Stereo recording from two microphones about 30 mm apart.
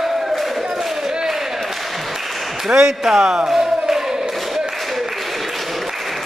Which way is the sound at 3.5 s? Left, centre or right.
Centre.